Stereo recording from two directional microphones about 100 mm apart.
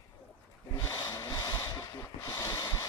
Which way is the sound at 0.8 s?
30° left (ahead or behind).